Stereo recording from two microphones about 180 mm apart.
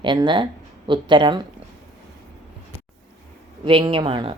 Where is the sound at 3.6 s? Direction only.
30° right (ahead or behind).